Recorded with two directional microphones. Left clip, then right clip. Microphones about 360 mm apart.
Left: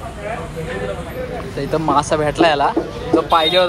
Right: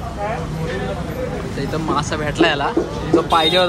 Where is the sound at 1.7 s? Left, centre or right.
Centre.